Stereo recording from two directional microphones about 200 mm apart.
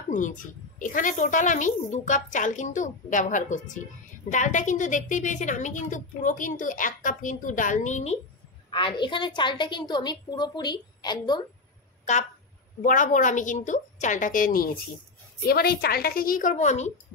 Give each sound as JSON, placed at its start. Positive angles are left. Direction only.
{"t": 0.1, "sound": "a woman's voice", "side_deg": 40}
{"t": 8.6, "sound": "a woman's voice", "side_deg": 25}
{"t": 12.8, "sound": "a woman's voice", "side_deg": 40}